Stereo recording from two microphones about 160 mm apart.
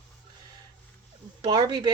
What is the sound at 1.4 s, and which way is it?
Speech, 25° right (ahead or behind).